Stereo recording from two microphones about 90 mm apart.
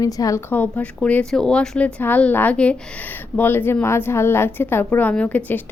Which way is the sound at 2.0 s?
20° left (ahead or behind).